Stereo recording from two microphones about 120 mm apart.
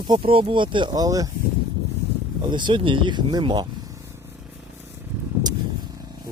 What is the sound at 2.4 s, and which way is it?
Speech, 40° right (ahead or behind).